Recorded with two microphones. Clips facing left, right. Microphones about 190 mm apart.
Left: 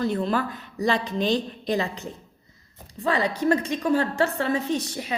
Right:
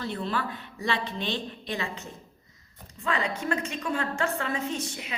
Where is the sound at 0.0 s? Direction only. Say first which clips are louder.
Left 7 dB; 45° left (ahead or behind).